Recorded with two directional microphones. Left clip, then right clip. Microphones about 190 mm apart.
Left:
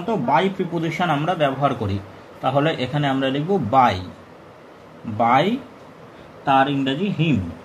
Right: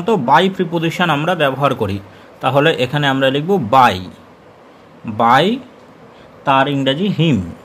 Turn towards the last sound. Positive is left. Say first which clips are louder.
# right 6 dB
turn(degrees=-65)  # may be behind; listen again after turning